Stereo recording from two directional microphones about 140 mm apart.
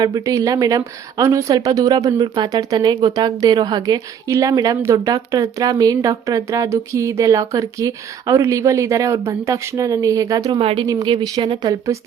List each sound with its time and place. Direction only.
0.0 s a woman's voice: 25° right (ahead or behind)
10.6 s speech: 40° right (ahead or behind)
10.8 s speech: 30° right (ahead or behind)